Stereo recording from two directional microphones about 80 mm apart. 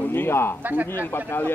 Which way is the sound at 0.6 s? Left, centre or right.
Right.